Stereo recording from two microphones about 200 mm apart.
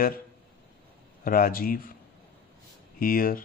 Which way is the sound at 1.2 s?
45° left (ahead or behind).